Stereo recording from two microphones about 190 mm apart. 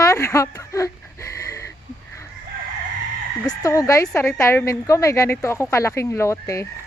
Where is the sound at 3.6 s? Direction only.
15° left (ahead or behind).